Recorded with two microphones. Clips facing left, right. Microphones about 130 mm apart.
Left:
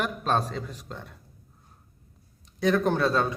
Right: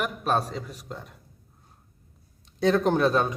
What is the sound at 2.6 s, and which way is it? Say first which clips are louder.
Speech: right 2 dB; 25° right (ahead or behind).